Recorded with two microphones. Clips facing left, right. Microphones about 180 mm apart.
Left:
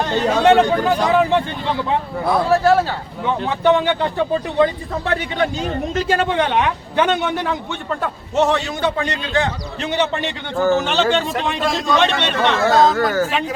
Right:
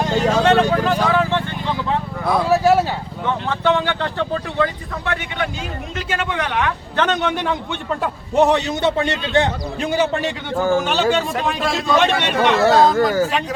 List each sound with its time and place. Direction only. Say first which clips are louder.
0.0 s vehicle: even; 10° right (ahead or behind)
0.3 s vehicle: left 3 dB; 10° left (ahead or behind)
2.3 s a man's voice: even; 10° right (ahead or behind)
3.2 s speech: left 3 dB; 15° left (ahead or behind)
5.0 s speech: left 4 dB; 35° left (ahead or behind); by 8.1 s centre (ahead or behind)
8.4 s a man's voice: right 2 dB; 15° right (ahead or behind)
9.8 s a man's voice: right 1 dB; 10° right (ahead or behind)